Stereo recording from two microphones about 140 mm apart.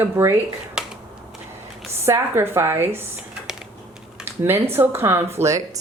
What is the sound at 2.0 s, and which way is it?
Speech, 20° right (ahead or behind).